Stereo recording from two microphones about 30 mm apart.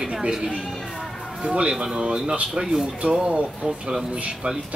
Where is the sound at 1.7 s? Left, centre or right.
Right.